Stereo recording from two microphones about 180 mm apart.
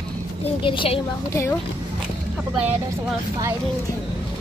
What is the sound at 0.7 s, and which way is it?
Speech, 30° left (ahead or behind).